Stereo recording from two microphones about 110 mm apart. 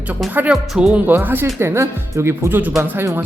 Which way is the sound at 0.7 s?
5° right (ahead or behind).